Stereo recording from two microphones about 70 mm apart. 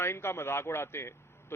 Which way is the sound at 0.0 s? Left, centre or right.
Left.